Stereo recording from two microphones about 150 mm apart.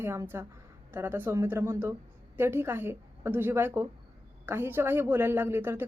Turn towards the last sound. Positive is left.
turn(degrees=-15)  # may be behind; listen again after turning